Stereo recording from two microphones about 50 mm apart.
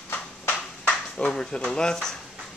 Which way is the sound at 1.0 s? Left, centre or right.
Centre.